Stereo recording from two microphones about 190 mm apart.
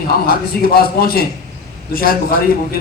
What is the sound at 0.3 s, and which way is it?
A man's voice, 55° left (ahead or behind).